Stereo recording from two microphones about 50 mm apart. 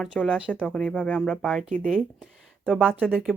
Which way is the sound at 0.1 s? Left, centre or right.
Left.